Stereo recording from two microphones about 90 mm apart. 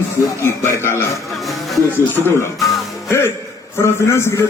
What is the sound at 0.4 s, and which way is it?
Speech, 30° left (ahead or behind).